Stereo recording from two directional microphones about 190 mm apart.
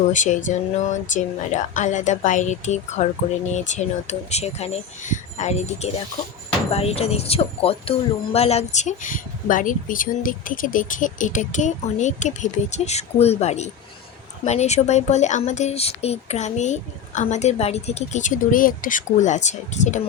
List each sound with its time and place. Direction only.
0.1 s speech: 40° left (ahead or behind)